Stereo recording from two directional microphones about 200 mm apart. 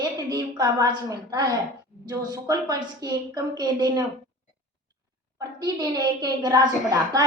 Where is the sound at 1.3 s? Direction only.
20° right (ahead or behind).